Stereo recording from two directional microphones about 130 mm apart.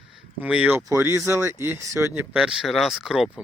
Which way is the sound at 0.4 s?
10° right (ahead or behind).